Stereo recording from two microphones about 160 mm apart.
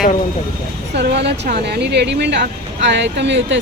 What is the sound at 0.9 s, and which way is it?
Speech, 90° right.